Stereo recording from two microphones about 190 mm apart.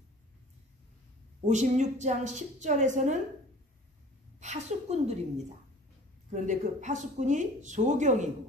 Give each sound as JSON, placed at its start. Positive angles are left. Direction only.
{"t": 1.5, "sound": "speech", "side_deg": -40}
{"t": 4.4, "sound": "speech", "side_deg": -35}
{"t": 6.3, "sound": "speech", "side_deg": -40}